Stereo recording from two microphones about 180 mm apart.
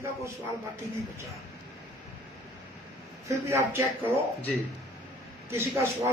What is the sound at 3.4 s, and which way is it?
Speech, 15° right (ahead or behind).